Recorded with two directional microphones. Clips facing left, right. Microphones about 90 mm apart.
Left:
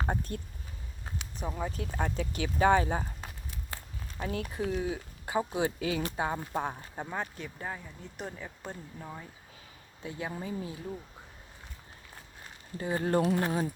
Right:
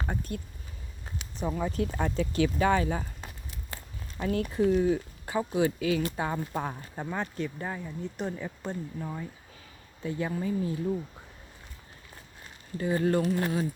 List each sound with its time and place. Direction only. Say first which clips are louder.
0.0 s speech: left 1 dB; 35° left (ahead or behind)
1.5 s speech: right 4 dB; 5° left (ahead or behind); by 3.1 s 25° left (ahead or behind)
4.2 s speech: right 7 dB; 15° left (ahead or behind)
10.0 s speech: right 6 dB; 15° left (ahead or behind)
12.7 s speech: right 2 dB; 25° left (ahead or behind)